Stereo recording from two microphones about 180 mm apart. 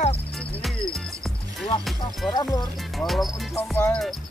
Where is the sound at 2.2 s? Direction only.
Centre (ahead or behind).